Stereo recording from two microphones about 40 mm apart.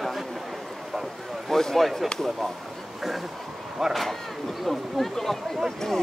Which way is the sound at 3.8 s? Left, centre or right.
Centre.